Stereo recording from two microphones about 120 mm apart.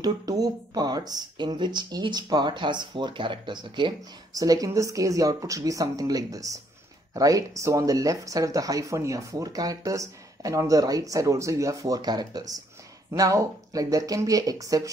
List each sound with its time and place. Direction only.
0.0 s speech: 30° right (ahead or behind)